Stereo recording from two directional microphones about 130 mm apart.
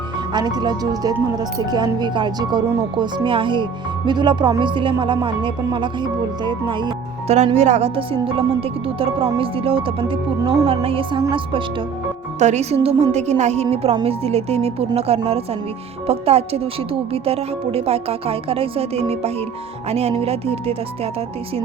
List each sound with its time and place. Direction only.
0.3 s speech: 30° right (ahead or behind)
7.3 s speech: 55° right (ahead or behind); by 11.6 s 40° right (ahead or behind)
12.4 s a woman's voice: 60° right (ahead or behind)